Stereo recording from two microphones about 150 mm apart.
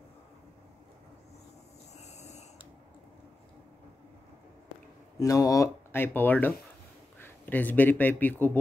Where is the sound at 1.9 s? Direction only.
50° left (ahead or behind).